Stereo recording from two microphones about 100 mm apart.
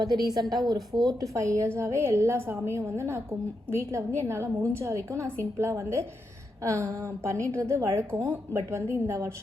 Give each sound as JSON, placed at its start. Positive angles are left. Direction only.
{"t": 0.6, "sound": "a woman's voice", "side_deg": -45}